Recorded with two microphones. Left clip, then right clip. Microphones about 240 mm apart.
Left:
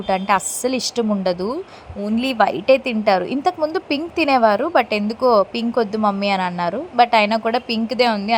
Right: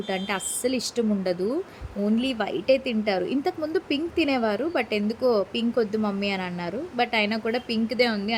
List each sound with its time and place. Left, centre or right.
0.1 s a woman's voice: centre